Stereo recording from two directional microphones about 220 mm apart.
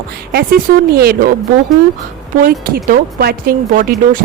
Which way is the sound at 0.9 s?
45° right (ahead or behind).